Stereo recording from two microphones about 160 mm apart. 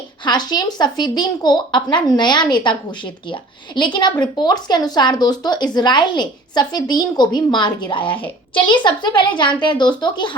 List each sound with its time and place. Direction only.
0.3 s speech: 25° left (ahead or behind)